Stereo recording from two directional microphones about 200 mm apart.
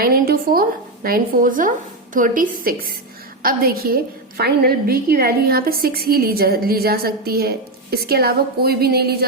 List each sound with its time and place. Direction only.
0.0 s a woman's voice: 50° right (ahead or behind)